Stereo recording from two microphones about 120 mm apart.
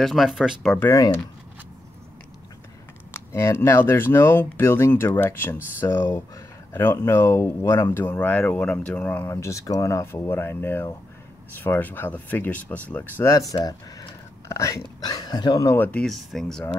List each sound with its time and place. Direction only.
0.0 s speech: centre (ahead or behind)
0.7 s speech: 20° left (ahead or behind)
3.1 s speech: 20° left (ahead or behind)
13.5 s speech: 30° left (ahead or behind)
15.7 s speech: 15° left (ahead or behind)
16.1 s speech: centre (ahead or behind)